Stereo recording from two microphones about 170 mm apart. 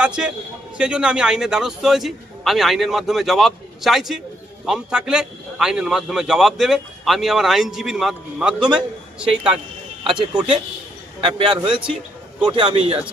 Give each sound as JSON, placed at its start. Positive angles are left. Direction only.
{"t": 0.0, "sound": "a man's voice", "side_deg": -5}
{"t": 11.2, "sound": "a man's voice", "side_deg": -30}